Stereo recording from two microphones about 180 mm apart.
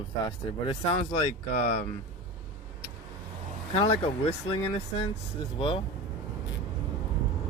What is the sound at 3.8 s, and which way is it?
Speech, 30° left (ahead or behind).